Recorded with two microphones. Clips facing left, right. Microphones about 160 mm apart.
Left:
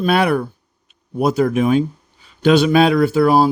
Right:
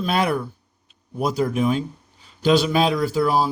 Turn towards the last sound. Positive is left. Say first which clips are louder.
# left 7 dB
turn(degrees=60)  # may be behind; listen again after turning